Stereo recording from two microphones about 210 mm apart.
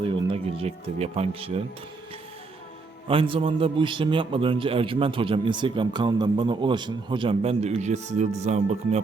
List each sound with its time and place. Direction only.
0.0 s a man's voice: 25° right (ahead or behind)
3.1 s a man's voice: 25° right (ahead or behind)